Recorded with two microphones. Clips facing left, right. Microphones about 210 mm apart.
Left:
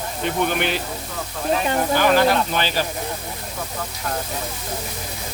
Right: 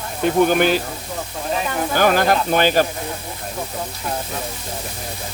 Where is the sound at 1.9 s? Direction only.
45° right (ahead or behind).